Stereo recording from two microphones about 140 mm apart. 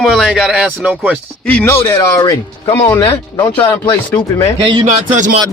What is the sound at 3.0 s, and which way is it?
Speech, 35° left (ahead or behind).